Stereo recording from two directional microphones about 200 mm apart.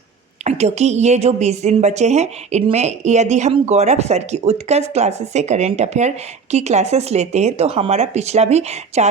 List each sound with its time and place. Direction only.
0.4 s a woman's voice: 35° right (ahead or behind)